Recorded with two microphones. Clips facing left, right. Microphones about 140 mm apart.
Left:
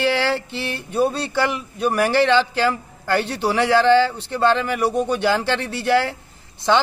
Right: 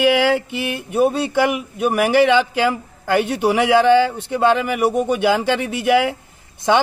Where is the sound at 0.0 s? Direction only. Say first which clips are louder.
Right 5 dB; 15° right (ahead or behind).